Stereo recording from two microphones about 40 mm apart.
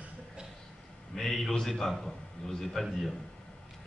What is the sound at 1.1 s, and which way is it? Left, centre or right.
A man's voice, centre.